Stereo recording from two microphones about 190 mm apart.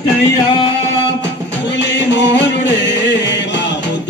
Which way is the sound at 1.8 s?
65° left (ahead or behind).